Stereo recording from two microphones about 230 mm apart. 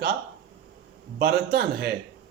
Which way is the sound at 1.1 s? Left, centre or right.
Right.